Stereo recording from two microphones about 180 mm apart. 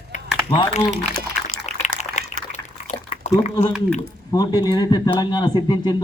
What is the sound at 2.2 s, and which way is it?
Liquid, 40° left (ahead or behind).